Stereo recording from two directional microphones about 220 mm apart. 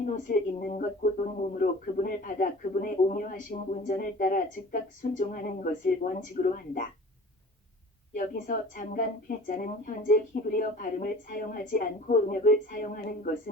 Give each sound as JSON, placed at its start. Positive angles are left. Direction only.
{"t": 0.0, "sound": "speech", "side_deg": 35}
{"t": 8.1, "sound": "speech", "side_deg": 35}